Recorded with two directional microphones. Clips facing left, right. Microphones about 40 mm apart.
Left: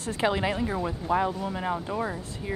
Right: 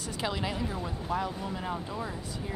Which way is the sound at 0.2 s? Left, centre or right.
Left.